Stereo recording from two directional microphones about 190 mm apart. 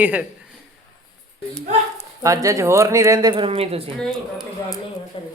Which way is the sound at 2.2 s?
15° right (ahead or behind).